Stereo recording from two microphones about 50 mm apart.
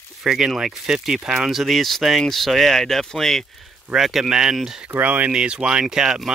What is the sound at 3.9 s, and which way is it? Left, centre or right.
Speech, centre.